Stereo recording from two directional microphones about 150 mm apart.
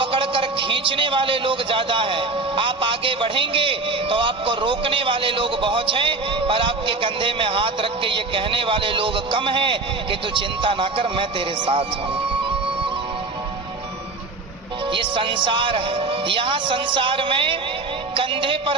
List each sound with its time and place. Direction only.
0.0 s a man's voice: 35° right (ahead or behind)
14.9 s a man's voice: 35° right (ahead or behind)